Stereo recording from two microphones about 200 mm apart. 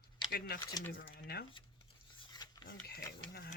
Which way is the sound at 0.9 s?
50° left (ahead or behind).